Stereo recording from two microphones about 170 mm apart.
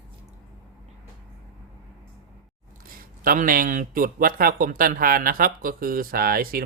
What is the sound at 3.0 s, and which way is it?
Speech, 55° right (ahead or behind).